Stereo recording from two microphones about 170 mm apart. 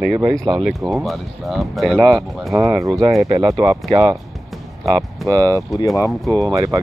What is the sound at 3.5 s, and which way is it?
Speech, centre (ahead or behind).